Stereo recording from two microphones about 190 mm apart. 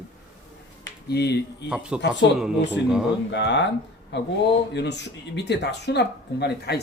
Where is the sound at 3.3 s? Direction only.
65° left (ahead or behind).